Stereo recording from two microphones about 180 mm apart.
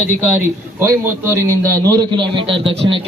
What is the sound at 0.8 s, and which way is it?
A man's voice, 15° right (ahead or behind).